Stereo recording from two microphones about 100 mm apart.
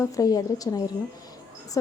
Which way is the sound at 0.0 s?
35° left (ahead or behind).